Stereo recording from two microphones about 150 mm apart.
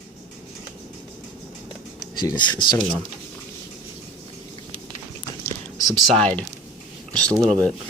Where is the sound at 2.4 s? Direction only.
30° left (ahead or behind).